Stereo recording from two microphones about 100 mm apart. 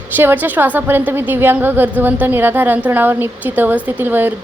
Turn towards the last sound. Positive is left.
turn(degrees=-20)  # may be behind; listen again after turning